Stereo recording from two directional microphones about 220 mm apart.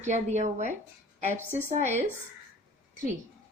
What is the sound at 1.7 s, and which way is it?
Speech, 30° right (ahead or behind).